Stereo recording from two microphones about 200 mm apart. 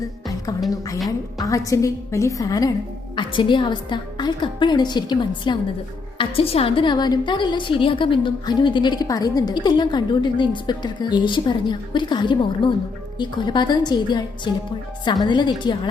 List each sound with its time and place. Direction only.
0.0 s music: 15° left (ahead or behind)
1.4 s a woman's voice: 15° left (ahead or behind)